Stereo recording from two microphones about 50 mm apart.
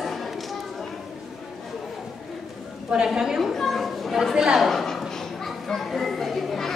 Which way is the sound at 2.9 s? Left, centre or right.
Centre.